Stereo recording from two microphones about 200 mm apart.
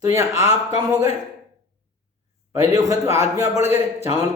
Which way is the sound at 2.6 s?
15° right (ahead or behind).